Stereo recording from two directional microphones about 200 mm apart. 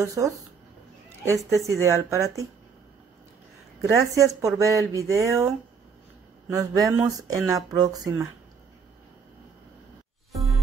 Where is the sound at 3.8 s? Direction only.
15° right (ahead or behind).